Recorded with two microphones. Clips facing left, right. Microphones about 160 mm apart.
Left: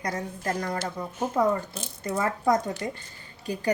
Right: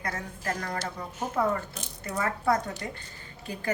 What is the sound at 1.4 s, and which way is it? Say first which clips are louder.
Speech: left 3 dB; 15° left (ahead or behind).